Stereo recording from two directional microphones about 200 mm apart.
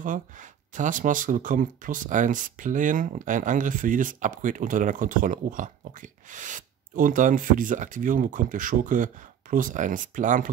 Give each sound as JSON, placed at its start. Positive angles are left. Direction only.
{"t": 0.0, "sound": "speech", "side_deg": -40}